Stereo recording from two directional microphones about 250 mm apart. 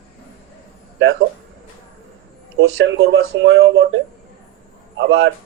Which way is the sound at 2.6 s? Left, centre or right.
Right.